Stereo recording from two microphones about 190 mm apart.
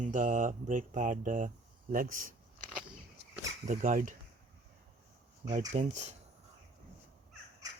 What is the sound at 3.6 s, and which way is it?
Speech, 40° right (ahead or behind).